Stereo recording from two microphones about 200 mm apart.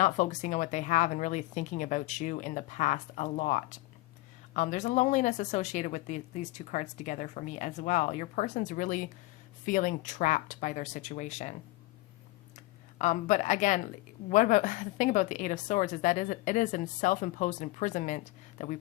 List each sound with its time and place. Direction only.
0.0 s speech: 40° left (ahead or behind)
13.0 s speech: 35° left (ahead or behind)